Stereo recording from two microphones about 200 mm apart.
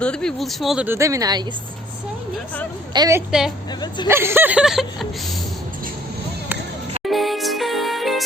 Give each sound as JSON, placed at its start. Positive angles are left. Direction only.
{"t": 0.0, "sound": "speech", "side_deg": 5}
{"t": 2.9, "sound": "speech", "side_deg": -15}
{"t": 3.8, "sound": "speech", "side_deg": 20}
{"t": 4.1, "sound": "speech", "side_deg": -10}
{"t": 7.0, "sound": "music", "side_deg": 0}